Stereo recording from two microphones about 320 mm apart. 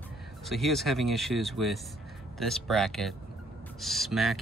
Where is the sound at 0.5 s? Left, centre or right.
Centre.